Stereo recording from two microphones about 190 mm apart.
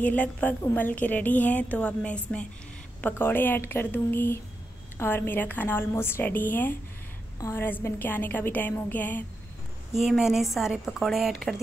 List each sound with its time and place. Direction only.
0.0 s a woman's voice: 10° left (ahead or behind)
9.9 s a woman's voice: centre (ahead or behind)